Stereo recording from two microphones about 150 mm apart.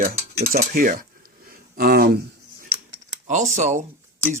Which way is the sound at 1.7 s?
85° right.